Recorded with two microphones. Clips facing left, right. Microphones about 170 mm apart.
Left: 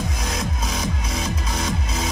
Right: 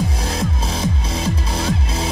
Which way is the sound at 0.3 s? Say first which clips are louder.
Right 4 dB; 30° right (ahead or behind).